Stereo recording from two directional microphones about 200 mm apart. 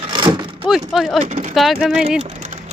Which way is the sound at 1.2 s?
35° right (ahead or behind).